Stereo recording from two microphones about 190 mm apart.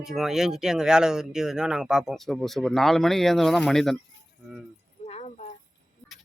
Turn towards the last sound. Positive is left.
turn(degrees=35)  # may be behind; listen again after turning